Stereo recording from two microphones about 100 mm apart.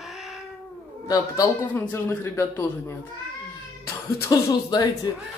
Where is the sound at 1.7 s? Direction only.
25° left (ahead or behind).